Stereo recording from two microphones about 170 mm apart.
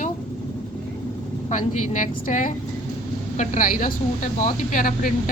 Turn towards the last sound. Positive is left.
turn(degrees=55)  # may be behind; listen again after turning